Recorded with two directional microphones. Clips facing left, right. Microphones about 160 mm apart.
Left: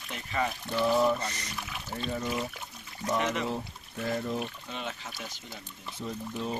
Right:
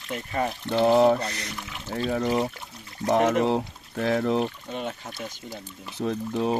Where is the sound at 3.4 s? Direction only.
75° right (ahead or behind).